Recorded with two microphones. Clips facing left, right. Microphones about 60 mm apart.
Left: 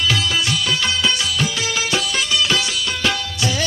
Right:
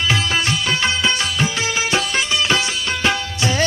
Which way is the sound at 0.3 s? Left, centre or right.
Right.